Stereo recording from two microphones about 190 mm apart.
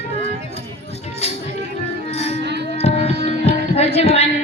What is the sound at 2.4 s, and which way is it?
Music, 60° right (ahead or behind).